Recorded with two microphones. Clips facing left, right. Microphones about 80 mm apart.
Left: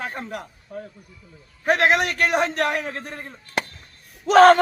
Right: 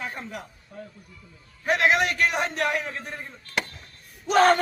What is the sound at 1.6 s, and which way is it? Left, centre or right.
Speech, left.